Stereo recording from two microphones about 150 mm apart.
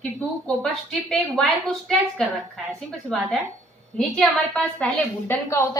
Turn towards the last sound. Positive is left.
turn(degrees=20)  # may be behind; listen again after turning